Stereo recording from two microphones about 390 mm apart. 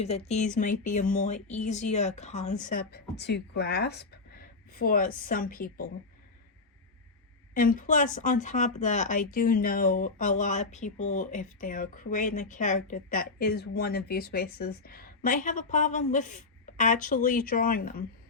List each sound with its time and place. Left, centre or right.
0.0 s speech: centre
7.5 s speech: left